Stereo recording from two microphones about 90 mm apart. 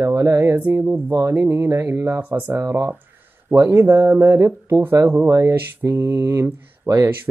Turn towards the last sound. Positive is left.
turn(degrees=-35)  # may be behind; listen again after turning